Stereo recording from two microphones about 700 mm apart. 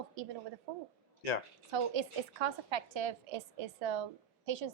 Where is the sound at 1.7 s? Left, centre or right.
Right.